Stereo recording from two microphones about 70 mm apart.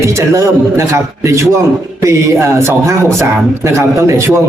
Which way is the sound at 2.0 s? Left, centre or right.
Right.